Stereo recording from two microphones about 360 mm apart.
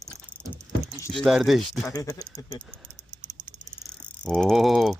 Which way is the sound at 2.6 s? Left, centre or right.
Centre.